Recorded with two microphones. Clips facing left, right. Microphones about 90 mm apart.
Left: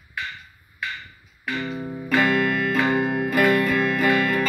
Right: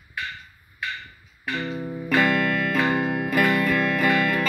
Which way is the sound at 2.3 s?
20° left (ahead or behind).